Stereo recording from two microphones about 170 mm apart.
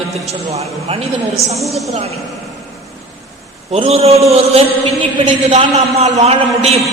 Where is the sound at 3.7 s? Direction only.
40° right (ahead or behind).